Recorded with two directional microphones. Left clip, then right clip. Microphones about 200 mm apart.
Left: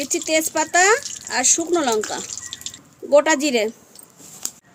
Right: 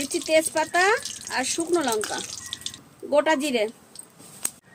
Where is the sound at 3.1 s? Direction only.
60° left (ahead or behind).